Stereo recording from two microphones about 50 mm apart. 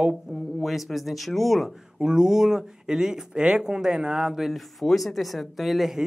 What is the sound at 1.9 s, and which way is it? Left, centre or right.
Speech, centre.